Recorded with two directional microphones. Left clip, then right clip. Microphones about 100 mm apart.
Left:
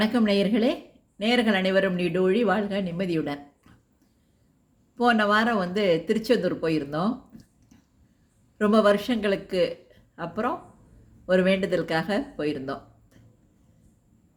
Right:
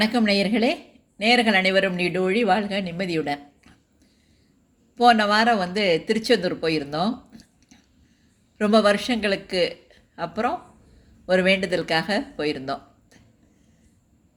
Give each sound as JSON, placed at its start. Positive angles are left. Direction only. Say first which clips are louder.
{"t": 0.0, "sound": "speech", "louder": "right 2 dB", "side_deg": 20}
{"t": 4.9, "sound": "speech", "louder": "right 4 dB", "side_deg": 20}
{"t": 6.6, "sound": "a sound", "louder": "right 2 dB", "side_deg": 20}
{"t": 8.5, "sound": "speech", "louder": "right 2 dB", "side_deg": 20}